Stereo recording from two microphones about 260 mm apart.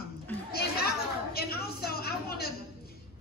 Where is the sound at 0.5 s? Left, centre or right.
Left.